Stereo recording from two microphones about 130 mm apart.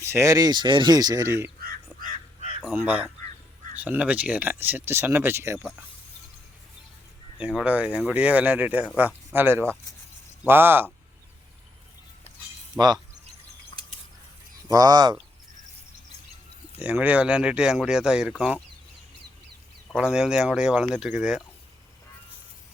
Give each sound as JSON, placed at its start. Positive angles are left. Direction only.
{"t": 0.0, "sound": "speech", "side_deg": -20}
{"t": 2.0, "sound": "crow", "side_deg": -90}
{"t": 2.6, "sound": "speech", "side_deg": -15}
{"t": 7.3, "sound": "speech", "side_deg": -10}
{"t": 12.8, "sound": "speech", "side_deg": -10}
{"t": 14.7, "sound": "speech", "side_deg": -30}
{"t": 16.8, "sound": "speech", "side_deg": -10}
{"t": 20.0, "sound": "speech", "side_deg": -5}